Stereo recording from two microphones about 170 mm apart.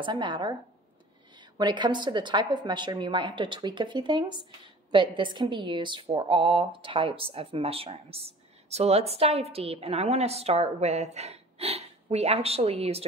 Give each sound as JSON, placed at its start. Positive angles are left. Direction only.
{"t": 0.0, "sound": "a woman's voice", "side_deg": -25}